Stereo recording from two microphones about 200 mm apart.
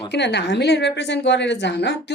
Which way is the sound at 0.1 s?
60° left (ahead or behind).